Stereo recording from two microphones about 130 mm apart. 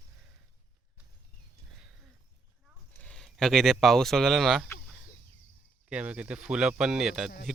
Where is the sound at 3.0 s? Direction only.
5° left (ahead or behind).